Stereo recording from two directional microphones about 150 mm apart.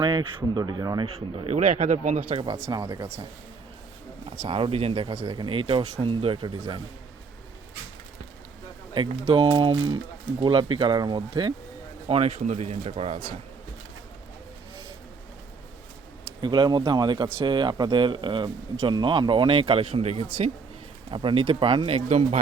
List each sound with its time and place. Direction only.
0.0 s speech: 30° right (ahead or behind)
1.0 s speech: 45° right (ahead or behind)
2.3 s speech: 35° right (ahead or behind)
2.6 s speech: 20° right (ahead or behind)
4.4 s speech: 40° right (ahead or behind)
9.0 s speech: 35° right (ahead or behind)
12.0 s speech: 45° right (ahead or behind)
16.2 s speech: 30° right (ahead or behind); by 20.2 s 45° right (ahead or behind)
21.1 s speech: 35° right (ahead or behind)